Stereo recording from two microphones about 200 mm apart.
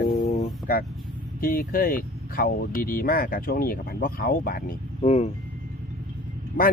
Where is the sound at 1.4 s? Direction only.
45° left (ahead or behind).